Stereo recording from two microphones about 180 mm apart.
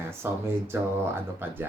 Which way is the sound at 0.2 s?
15° right (ahead or behind).